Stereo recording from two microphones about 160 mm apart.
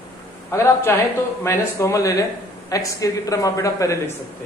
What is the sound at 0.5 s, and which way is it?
Speech, 15° left (ahead or behind).